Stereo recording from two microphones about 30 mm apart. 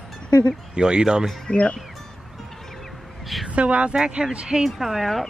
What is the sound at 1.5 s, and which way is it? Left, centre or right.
Speech, left.